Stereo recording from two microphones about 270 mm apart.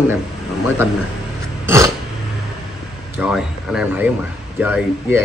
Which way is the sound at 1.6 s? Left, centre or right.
Centre.